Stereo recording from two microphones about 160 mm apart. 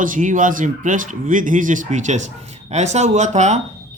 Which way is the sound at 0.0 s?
55° right (ahead or behind).